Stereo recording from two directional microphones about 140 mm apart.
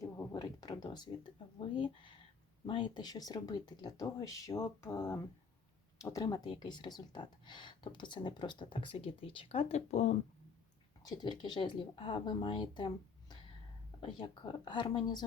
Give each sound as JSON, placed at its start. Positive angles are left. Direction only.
{"t": 0.0, "sound": "speech", "side_deg": 30}
{"t": 11.0, "sound": "speech", "side_deg": 30}